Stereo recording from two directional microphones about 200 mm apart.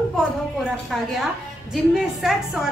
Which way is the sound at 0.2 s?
Centre (ahead or behind).